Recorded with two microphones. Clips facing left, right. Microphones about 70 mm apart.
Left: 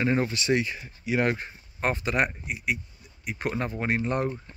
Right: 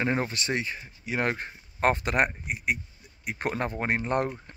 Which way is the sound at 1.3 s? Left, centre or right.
Right.